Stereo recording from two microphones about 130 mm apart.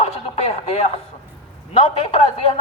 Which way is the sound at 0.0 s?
55° left (ahead or behind).